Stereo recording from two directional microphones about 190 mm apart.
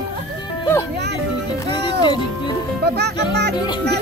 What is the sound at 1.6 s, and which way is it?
Music, 25° left (ahead or behind).